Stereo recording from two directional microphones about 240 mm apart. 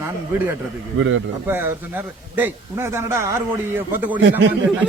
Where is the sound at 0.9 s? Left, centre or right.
Right.